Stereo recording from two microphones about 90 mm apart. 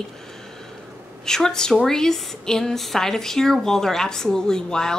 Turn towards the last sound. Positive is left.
turn(degrees=5)  # may be behind; listen again after turning